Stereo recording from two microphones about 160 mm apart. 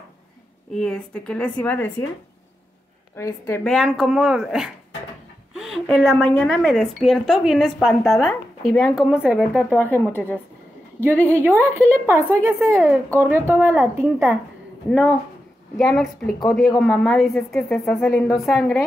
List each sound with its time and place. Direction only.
0.7 s speech: 5° left (ahead or behind)
3.2 s speech: 15° left (ahead or behind)
3.6 s a woman's voice: centre (ahead or behind)
9.7 s speech: 15° left (ahead or behind)
11.3 s a woman's voice: 15° right (ahead or behind)
14.9 s a woman's voice: centre (ahead or behind)